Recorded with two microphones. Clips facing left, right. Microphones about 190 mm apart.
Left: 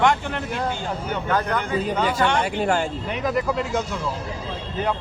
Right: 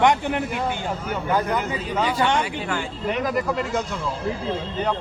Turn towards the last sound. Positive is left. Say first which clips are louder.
# left 1 dB
turn(degrees=0)  # may be behind; listen again after turning